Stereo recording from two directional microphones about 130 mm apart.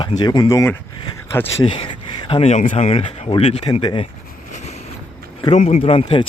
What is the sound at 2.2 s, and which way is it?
Speech, 45° left (ahead or behind).